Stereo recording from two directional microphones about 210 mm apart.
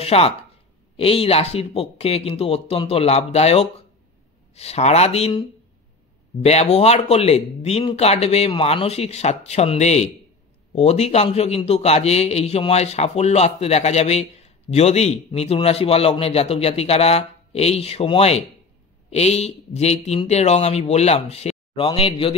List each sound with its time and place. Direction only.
0.0 s a man's voice: 30° left (ahead or behind)
6.4 s a man's voice: 30° left (ahead or behind)